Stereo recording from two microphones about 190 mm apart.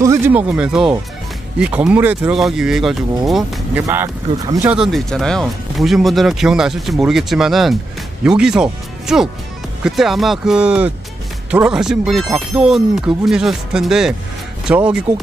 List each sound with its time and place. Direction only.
0.0 s speech: 10° right (ahead or behind)
3.8 s speech: 15° right (ahead or behind)
4.7 s speech: centre (ahead or behind)